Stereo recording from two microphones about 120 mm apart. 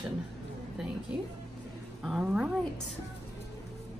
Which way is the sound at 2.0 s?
5° right (ahead or behind).